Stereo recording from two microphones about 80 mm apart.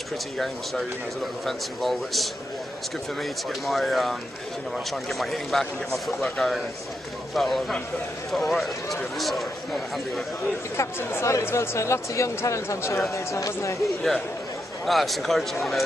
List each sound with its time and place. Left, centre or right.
0.4 s a man's voice: centre
10.8 s speech: left
14.9 s a man's voice: centre